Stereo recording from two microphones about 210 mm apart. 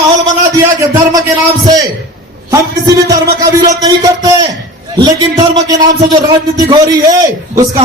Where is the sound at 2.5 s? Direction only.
15° right (ahead or behind).